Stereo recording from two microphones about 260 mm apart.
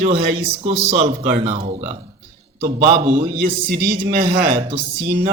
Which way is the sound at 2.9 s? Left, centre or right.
Right.